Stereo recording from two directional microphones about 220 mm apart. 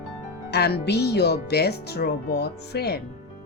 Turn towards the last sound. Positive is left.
turn(degrees=45)  # may be behind; listen again after turning